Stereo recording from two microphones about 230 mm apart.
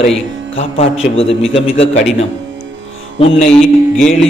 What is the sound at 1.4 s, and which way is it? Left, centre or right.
Speech, left.